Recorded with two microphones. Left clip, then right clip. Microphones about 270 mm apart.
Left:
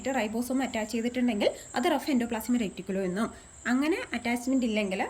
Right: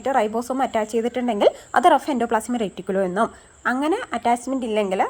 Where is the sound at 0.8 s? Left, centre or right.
Right.